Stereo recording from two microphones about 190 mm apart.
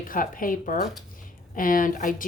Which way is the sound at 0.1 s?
45° left (ahead or behind).